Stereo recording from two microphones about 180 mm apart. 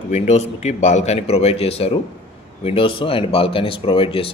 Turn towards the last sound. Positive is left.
turn(degrees=30)  # may be behind; listen again after turning